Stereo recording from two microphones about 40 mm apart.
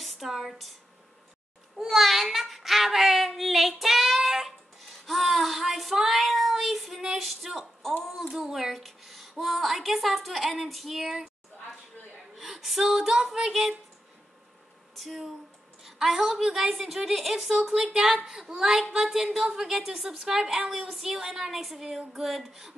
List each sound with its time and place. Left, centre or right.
0.0 s a sound: centre
0.3 s speech: centre
1.8 s child singing: centre
7.2 s a sound: centre
9.4 s speech: centre
12.4 s speech: centre
15.0 s a woman's voice: centre